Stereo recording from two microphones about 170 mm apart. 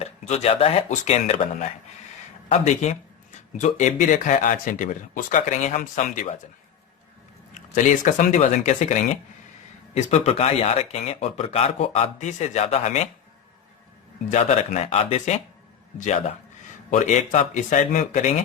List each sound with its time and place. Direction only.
0.0 s speech: 40° left (ahead or behind)
7.5 s speech: 50° left (ahead or behind)
14.3 s speech: 45° left (ahead or behind)